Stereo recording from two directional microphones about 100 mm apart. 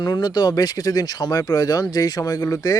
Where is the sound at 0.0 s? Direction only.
45° left (ahead or behind).